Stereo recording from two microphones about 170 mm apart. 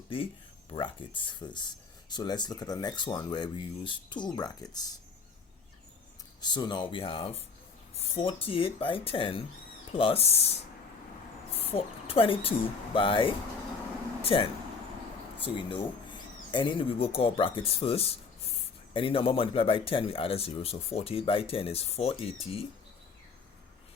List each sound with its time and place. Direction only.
0.7 s speech: 30° left (ahead or behind)
6.4 s speech: 25° left (ahead or behind)
11.7 s speech: 35° left (ahead or behind)